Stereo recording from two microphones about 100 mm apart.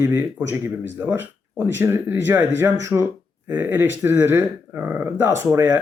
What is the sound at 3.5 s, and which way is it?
Speech, 20° right (ahead or behind).